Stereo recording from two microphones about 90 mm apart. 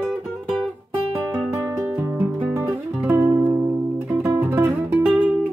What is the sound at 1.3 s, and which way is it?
Music, 15° right (ahead or behind).